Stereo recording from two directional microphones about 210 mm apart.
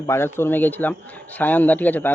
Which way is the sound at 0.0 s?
15° left (ahead or behind).